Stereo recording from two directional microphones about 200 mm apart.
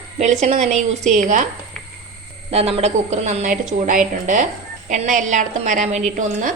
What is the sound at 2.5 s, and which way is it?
A woman's voice, 30° right (ahead or behind).